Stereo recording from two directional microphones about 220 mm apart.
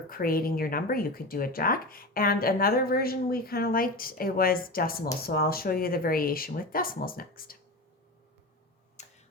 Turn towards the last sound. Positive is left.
turn(degrees=40)  # may be behind; listen again after turning